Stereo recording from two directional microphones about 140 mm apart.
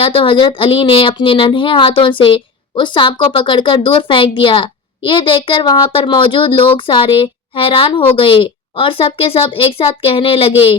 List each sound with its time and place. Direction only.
0.0 s speech: 40° left (ahead or behind)